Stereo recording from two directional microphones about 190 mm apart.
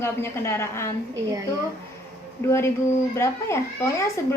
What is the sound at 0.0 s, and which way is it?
Speech, 15° left (ahead or behind).